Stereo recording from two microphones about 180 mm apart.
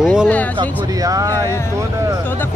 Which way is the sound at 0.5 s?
20° right (ahead or behind).